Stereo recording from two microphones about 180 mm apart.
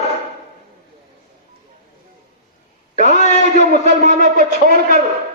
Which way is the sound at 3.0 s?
40° left (ahead or behind).